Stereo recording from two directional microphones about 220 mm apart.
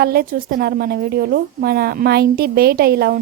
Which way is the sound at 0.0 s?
45° right (ahead or behind).